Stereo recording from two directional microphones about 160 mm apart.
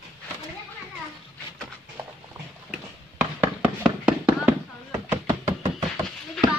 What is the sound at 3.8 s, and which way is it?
Fireworks, 5° right (ahead or behind).